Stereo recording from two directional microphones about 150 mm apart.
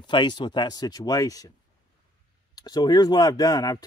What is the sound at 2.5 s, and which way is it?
Speech, 25° left (ahead or behind).